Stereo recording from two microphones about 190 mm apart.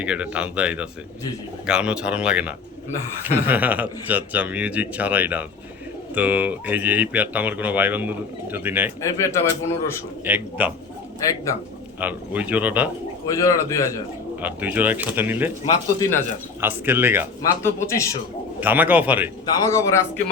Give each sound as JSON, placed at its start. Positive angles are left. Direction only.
{"t": 0.0, "sound": "speech", "side_deg": -5}
{"t": 9.0, "sound": "a man's voice", "side_deg": 15}
{"t": 10.2, "sound": "speech", "side_deg": -10}
{"t": 11.2, "sound": "a man's voice", "side_deg": 15}
{"t": 11.9, "sound": "speech", "side_deg": -10}
{"t": 13.2, "sound": "a man's voice", "side_deg": 15}
{"t": 14.4, "sound": "speech", "side_deg": -10}
{"t": 16.0, "sound": "a man's voice", "side_deg": 10}
{"t": 16.6, "sound": "speech", "side_deg": -10}
{"t": 17.4, "sound": "a man's voice", "side_deg": 15}
{"t": 18.6, "sound": "speech", "side_deg": -10}
{"t": 19.5, "sound": "a man's voice", "side_deg": 15}